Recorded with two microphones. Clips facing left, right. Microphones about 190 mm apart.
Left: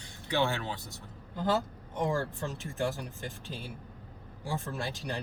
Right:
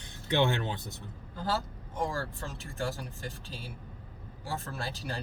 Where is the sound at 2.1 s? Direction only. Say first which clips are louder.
Left 4 dB; 20° left (ahead or behind).